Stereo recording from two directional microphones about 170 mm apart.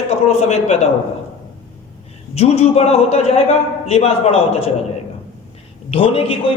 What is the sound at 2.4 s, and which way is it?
A man's voice, 40° left (ahead or behind).